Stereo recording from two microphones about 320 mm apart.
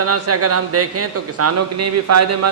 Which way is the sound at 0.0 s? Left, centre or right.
Right.